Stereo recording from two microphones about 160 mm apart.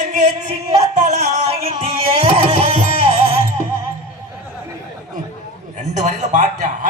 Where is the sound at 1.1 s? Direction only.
40° right (ahead or behind).